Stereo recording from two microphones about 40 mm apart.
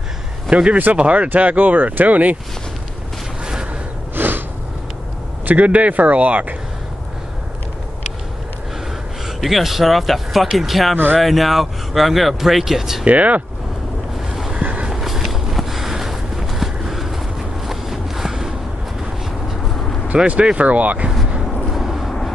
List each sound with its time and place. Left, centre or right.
0.5 s speech: right
1.3 s speech: right
4.1 s a sound: right
5.4 s speech: right
9.4 s speech: centre
13.0 s speech: right
14.6 s a sound: right
14.9 s a sound: centre
20.1 s speech: right
20.5 s speech: right
21.6 s vehicle: centre